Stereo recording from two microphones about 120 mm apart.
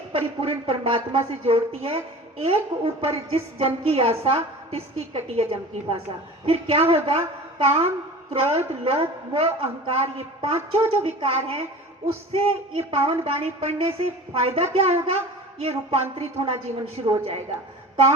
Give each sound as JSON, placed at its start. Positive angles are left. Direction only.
{"t": 0.1, "sound": "a woman's voice", "side_deg": -50}